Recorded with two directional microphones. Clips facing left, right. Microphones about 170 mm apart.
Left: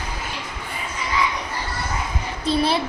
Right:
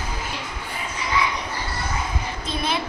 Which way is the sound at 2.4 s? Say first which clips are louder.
Left 7 dB; 35° left (ahead or behind).